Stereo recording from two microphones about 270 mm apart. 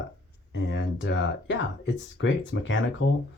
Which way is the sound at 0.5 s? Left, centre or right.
Left.